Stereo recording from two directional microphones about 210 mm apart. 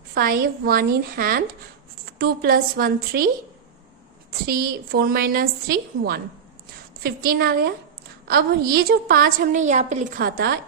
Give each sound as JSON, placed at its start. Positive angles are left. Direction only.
{"t": 0.1, "sound": "a woman's voice", "side_deg": -45}
{"t": 4.4, "sound": "a woman's voice", "side_deg": -45}